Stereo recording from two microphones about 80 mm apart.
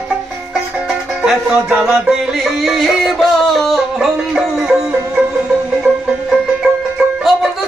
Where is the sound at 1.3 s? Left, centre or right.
Centre.